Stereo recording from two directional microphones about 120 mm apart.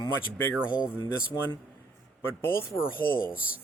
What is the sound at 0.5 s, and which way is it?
Speech, 10° right (ahead or behind).